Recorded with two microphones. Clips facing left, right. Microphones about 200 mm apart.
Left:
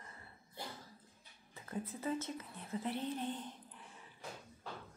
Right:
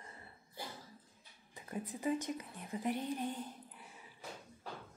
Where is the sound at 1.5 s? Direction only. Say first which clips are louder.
Even; 15° right (ahead or behind).